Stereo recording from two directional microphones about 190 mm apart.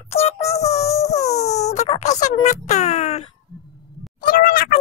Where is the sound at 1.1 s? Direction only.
35° left (ahead or behind).